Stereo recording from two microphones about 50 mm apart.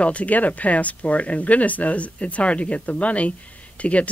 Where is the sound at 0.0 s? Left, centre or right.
Left.